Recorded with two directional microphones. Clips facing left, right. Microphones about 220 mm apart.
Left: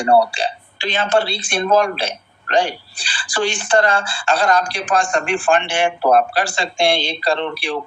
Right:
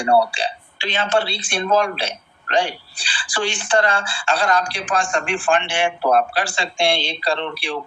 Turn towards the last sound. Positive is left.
turn(degrees=45)  # may be behind; listen again after turning